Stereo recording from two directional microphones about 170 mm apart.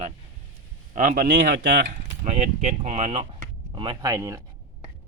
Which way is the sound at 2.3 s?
40° right (ahead or behind).